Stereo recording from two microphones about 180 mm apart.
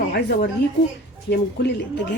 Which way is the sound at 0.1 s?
65° left (ahead or behind).